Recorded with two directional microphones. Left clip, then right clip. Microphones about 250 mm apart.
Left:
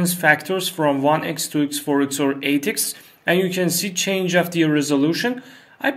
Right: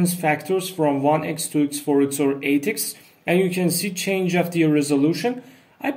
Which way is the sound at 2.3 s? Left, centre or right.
Centre.